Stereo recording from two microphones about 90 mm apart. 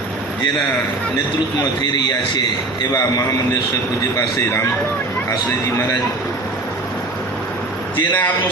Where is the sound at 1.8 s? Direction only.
55° left (ahead or behind).